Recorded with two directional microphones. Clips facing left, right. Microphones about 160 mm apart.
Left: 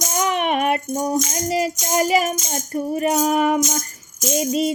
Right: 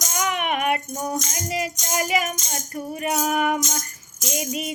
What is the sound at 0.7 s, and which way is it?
Music, 30° left (ahead or behind).